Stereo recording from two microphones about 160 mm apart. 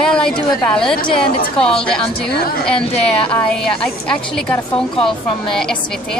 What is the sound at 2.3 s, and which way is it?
Speech, 75° left (ahead or behind).